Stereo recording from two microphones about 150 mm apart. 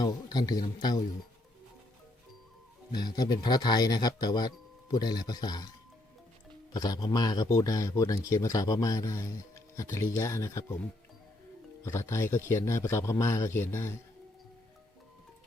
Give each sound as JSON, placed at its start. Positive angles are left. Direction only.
{"t": 0.0, "sound": "speech", "side_deg": 25}
{"t": 2.9, "sound": "speech", "side_deg": 30}
{"t": 6.7, "sound": "speech", "side_deg": 25}
{"t": 11.8, "sound": "speech", "side_deg": 20}